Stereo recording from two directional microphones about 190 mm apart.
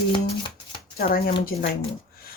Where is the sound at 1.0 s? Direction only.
50° left (ahead or behind).